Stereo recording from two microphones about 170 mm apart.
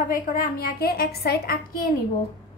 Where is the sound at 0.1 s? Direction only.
60° left (ahead or behind).